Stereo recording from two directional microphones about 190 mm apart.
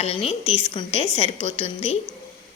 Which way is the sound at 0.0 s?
30° left (ahead or behind).